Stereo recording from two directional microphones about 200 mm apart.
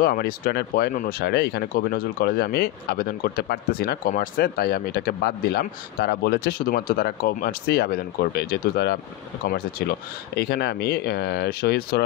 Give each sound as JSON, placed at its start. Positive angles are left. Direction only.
{"t": 0.0, "sound": "speech", "side_deg": 50}